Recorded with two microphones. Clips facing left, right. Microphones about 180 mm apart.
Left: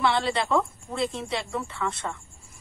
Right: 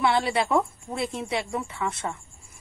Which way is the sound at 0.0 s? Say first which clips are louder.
Right 1 dB; 20° right (ahead or behind).